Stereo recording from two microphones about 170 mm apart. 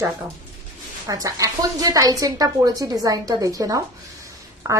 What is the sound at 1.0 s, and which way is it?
A woman's voice, 20° right (ahead or behind).